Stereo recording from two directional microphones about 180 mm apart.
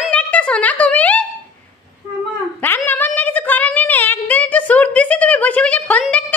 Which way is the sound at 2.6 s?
10° left (ahead or behind).